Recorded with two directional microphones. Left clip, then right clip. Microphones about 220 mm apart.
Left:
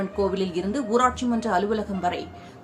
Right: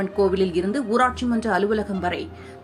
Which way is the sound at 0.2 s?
10° right (ahead or behind).